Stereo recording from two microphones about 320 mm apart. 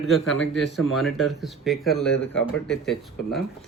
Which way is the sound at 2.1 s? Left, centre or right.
Left.